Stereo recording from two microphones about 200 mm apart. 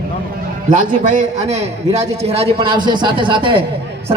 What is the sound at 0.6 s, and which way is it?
A man's voice, 40° right (ahead or behind).